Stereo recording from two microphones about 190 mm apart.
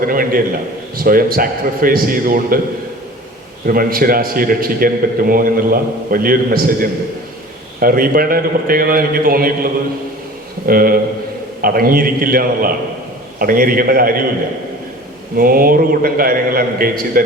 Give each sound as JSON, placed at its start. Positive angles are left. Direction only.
{"t": 0.0, "sound": "a man's voice", "side_deg": -50}
{"t": 3.7, "sound": "a man's voice", "side_deg": -50}
{"t": 10.7, "sound": "a man's voice", "side_deg": -50}
{"t": 15.4, "sound": "a man's voice", "side_deg": -50}